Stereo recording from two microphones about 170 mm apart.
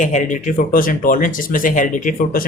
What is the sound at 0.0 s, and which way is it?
Speech, 45° left (ahead or behind).